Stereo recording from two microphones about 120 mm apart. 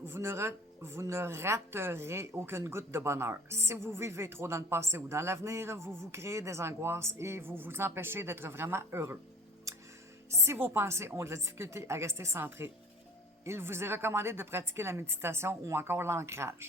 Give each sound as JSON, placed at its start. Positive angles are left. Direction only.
{"t": 0.0, "sound": "speech", "side_deg": -20}
{"t": 9.7, "sound": "music", "side_deg": -25}
{"t": 10.2, "sound": "speech", "side_deg": -20}